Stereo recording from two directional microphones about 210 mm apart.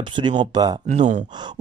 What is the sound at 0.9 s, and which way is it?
Speech, 35° right (ahead or behind).